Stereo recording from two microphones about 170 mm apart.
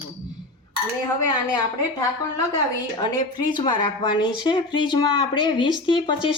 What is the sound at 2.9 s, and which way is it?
A woman's voice, 25° left (ahead or behind).